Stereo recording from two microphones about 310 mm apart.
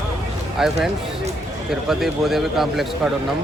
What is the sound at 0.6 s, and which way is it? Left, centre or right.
Speech, centre.